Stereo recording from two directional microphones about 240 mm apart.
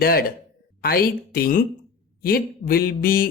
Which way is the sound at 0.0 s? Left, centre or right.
Left.